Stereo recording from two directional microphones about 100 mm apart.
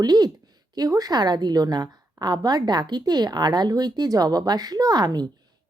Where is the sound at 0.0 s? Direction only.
40° right (ahead or behind).